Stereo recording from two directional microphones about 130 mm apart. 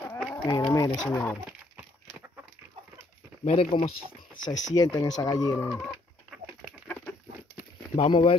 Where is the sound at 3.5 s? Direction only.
50° left (ahead or behind).